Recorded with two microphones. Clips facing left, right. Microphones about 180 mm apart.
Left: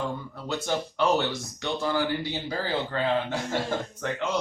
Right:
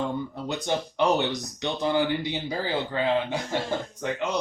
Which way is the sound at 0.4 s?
20° right (ahead or behind).